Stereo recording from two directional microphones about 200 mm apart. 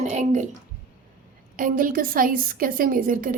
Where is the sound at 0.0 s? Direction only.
35° right (ahead or behind).